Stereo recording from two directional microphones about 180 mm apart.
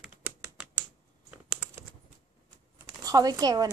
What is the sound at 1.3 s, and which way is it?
Computer keyboard, 5° right (ahead or behind).